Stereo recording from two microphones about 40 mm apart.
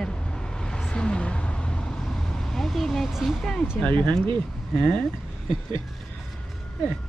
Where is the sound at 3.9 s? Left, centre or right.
Left.